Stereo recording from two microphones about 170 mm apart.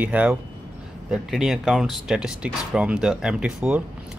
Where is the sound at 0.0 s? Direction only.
10° right (ahead or behind).